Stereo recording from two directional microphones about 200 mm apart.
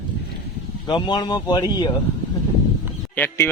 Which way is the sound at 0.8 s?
20° left (ahead or behind).